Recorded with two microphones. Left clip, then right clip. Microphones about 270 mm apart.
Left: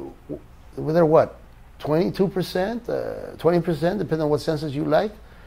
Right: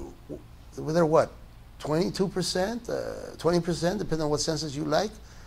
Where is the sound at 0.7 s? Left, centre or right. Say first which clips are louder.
Left 6 dB; left.